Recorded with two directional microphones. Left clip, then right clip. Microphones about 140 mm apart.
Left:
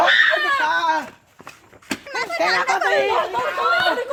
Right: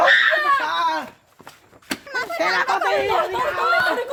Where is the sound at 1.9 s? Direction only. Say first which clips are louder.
Left 1 dB; 15° left (ahead or behind).